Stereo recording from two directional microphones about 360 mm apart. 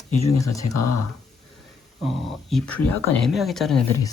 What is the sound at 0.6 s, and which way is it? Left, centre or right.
Speech, left.